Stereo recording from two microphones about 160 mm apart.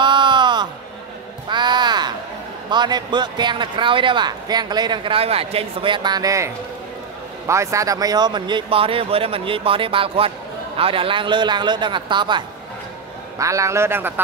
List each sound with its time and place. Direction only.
0.0 s a sound: 30° right (ahead or behind)
1.5 s crow: 25° right (ahead or behind)
2.7 s a man's voice: 30° right (ahead or behind)